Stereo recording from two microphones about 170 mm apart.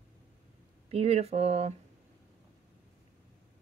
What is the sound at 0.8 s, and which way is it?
Speech, 35° right (ahead or behind).